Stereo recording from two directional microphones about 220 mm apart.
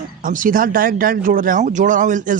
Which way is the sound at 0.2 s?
35° right (ahead or behind).